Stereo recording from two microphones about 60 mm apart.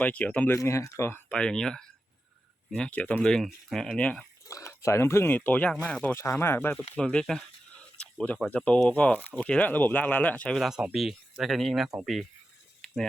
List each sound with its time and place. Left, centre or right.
0.0 s speech: left
0.6 s speech: left
1.3 s speech: centre
3.2 s speech: centre
3.8 s speech: centre
4.4 s speech: left
5.3 s speech: left
6.1 s speech: left
6.9 s speech: centre
7.8 s a sound: left
8.4 s speech: left
10.6 s speech: centre
12.8 s mechanisms: centre